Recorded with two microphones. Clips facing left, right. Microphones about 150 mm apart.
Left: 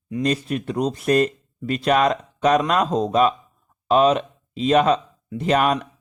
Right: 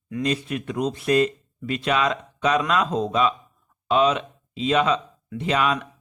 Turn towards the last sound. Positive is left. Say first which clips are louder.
# left 4 dB
turn(degrees=45)  # may be behind; listen again after turning